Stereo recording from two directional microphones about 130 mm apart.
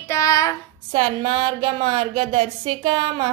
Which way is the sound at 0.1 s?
25° left (ahead or behind).